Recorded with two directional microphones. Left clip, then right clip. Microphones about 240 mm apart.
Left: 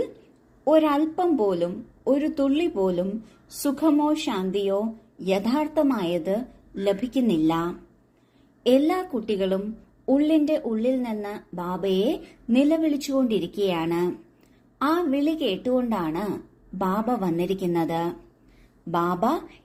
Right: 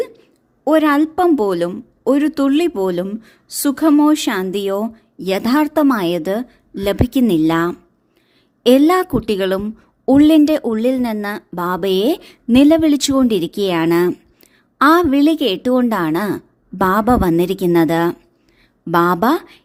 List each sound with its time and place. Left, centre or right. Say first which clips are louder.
0.6 s speech: right 6 dB; right